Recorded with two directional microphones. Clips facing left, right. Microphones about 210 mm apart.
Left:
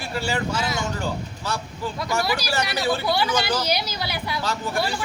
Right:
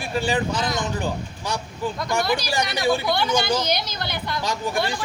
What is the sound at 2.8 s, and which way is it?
Speech, 15° right (ahead or behind).